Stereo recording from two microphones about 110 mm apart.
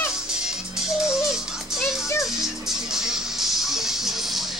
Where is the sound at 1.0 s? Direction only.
5° right (ahead or behind).